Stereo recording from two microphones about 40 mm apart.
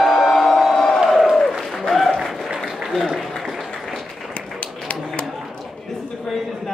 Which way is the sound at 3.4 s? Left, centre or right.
Centre.